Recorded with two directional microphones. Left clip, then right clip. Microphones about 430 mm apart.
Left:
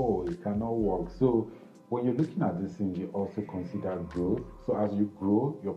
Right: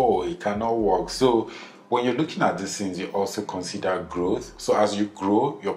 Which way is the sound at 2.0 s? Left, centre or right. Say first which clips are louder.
Right 7 dB; centre.